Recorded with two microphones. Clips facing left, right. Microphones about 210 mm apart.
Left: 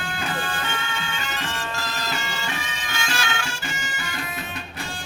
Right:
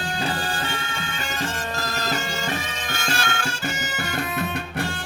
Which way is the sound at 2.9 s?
50° right (ahead or behind).